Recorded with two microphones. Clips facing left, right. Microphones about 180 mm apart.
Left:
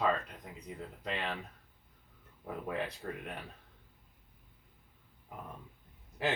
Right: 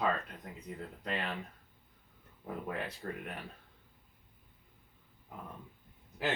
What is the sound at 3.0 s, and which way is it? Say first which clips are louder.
Speech: even; 5° left (ahead or behind).